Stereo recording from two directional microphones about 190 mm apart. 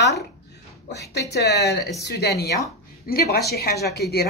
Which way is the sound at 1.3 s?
60° left (ahead or behind).